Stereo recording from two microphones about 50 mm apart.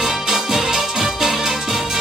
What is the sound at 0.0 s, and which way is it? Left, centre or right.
Music, centre.